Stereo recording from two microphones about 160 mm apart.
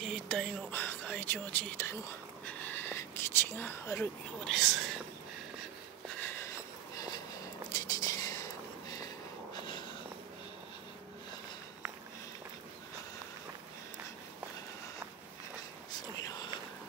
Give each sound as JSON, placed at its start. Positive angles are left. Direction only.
{"t": 0.0, "sound": "speech", "side_deg": 5}
{"t": 2.4, "sound": "whispering", "side_deg": 10}
{"t": 4.4, "sound": "speech", "side_deg": 0}
{"t": 6.2, "sound": "a sound", "side_deg": 15}
{"t": 7.7, "sound": "a sound", "side_deg": 20}
{"t": 15.9, "sound": "whispering", "side_deg": 25}